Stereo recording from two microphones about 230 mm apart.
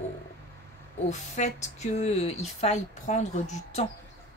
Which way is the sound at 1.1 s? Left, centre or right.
Left.